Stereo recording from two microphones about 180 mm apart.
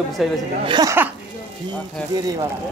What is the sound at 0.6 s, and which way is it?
Speech, 25° right (ahead or behind).